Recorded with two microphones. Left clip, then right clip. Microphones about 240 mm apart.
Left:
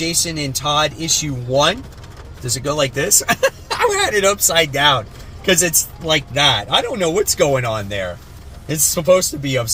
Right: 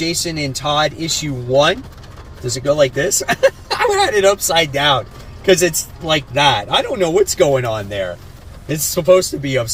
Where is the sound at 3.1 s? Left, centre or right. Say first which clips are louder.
Right 1 dB; centre.